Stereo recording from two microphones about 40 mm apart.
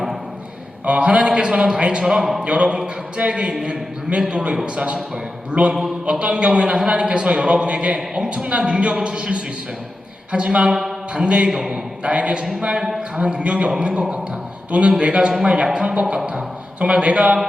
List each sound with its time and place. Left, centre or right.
0.9 s a man's voice: right
7.9 s a man's voice: centre
8.4 s a man's voice: right
10.7 s a man's voice: centre
11.1 s a man's voice: right